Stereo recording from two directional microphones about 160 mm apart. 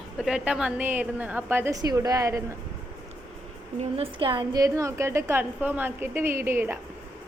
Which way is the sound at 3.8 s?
35° right (ahead or behind).